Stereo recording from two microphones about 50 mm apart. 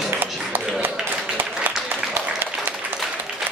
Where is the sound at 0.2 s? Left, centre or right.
Right.